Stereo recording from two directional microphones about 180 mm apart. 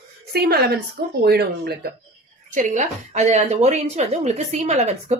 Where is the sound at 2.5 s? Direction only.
45° right (ahead or behind).